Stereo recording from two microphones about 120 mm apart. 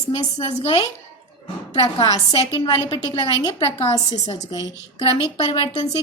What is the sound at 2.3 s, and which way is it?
A woman's voice, 45° left (ahead or behind).